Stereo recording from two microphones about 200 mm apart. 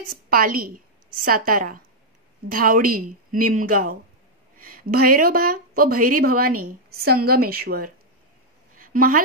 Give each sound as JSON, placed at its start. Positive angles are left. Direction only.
{"t": 0.3, "sound": "a woman's voice", "side_deg": -45}
{"t": 4.6, "sound": "speech", "side_deg": -50}
{"t": 8.7, "sound": "a sound", "side_deg": -45}